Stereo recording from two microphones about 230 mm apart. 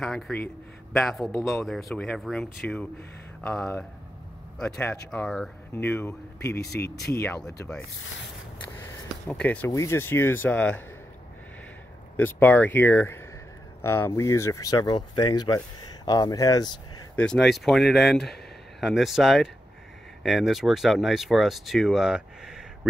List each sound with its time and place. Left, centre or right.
0.0 s speech: centre
6.8 s speech: left
7.2 s speech: centre
8.8 s speech: centre
12.2 s speech: centre
17.1 s speech: centre